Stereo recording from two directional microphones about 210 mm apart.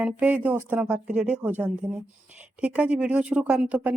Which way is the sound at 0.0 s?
5° right (ahead or behind).